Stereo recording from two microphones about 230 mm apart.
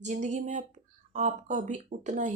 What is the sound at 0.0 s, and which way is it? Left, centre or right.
Speech, right.